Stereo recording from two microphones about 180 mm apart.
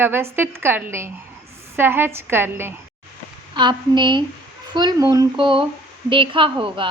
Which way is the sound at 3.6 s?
25° right (ahead or behind).